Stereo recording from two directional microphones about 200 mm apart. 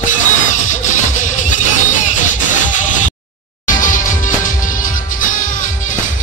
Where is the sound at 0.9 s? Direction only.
40° left (ahead or behind).